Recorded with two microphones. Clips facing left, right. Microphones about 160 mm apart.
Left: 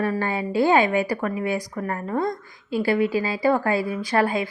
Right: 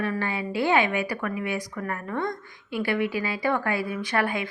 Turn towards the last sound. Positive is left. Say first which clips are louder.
# left 4 dB
turn(degrees=35)  # may be behind; listen again after turning